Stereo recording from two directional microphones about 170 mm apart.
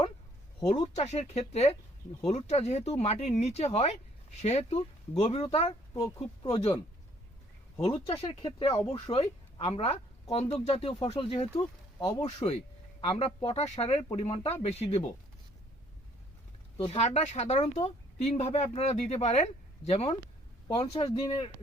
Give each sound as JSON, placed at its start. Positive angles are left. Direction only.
{"t": 0.8, "sound": "speech", "side_deg": 40}
{"t": 5.9, "sound": "speech", "side_deg": 25}
{"t": 7.9, "sound": "speech", "side_deg": 35}
{"t": 16.7, "sound": "speech", "side_deg": 35}